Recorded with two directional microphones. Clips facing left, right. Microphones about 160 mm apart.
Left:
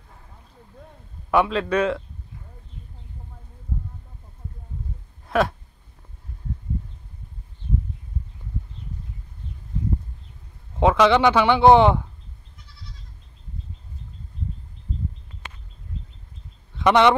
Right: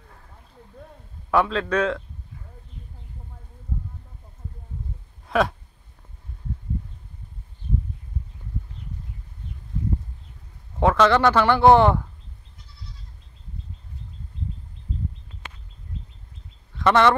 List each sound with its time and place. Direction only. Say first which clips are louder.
1.3 s speech: left 1 dB; centre (ahead or behind)
5.2 s a sound: left 1 dB; centre (ahead or behind)
10.8 s speech: left 1 dB; 10° left (ahead or behind)
16.8 s speech: left 1 dB; 15° left (ahead or behind)